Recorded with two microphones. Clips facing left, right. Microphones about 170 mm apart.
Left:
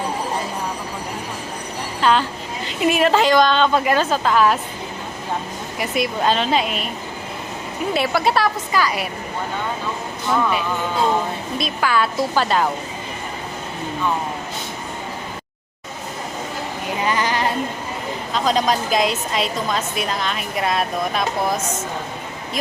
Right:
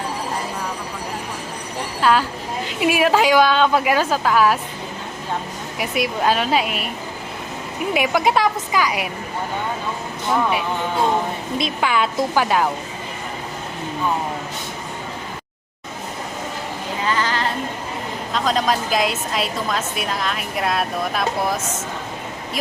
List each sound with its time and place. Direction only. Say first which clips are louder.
2.0 s a woman's voice: even; 5° right (ahead or behind)
5.8 s a woman's voice: even; 10° right (ahead or behind)
7.9 s a woman's voice: right 1 dB; 15° right (ahead or behind)
11.5 s a woman's voice: even; 20° right (ahead or behind)
17.0 s a sound: left 1 dB; 15° left (ahead or behind)
18.3 s a woman's voice: left 1 dB; centre (ahead or behind)